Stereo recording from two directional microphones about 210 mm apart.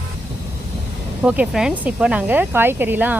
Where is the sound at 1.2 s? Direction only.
5° right (ahead or behind).